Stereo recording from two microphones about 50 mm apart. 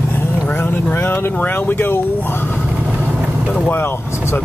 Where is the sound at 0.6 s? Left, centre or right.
Left.